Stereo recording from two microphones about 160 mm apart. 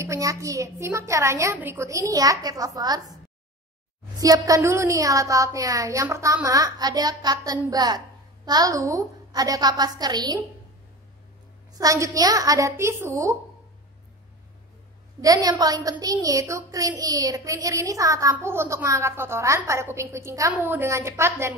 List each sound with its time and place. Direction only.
0.0 s a woman's voice: 20° right (ahead or behind)
4.2 s a woman's voice: 20° right (ahead or behind)
11.8 s a woman's voice: 20° right (ahead or behind)
15.2 s a woman's voice: 25° right (ahead or behind)